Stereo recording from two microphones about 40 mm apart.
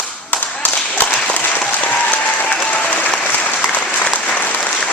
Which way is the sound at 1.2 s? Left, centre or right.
Left.